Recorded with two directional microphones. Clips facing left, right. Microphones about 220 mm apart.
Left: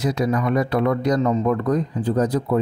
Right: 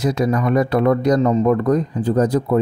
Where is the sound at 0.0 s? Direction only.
45° right (ahead or behind).